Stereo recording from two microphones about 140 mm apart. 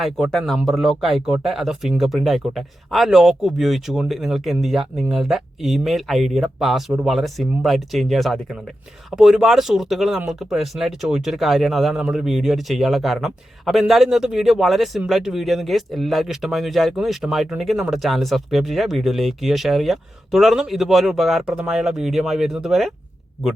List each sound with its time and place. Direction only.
0.0 s speech: centre (ahead or behind)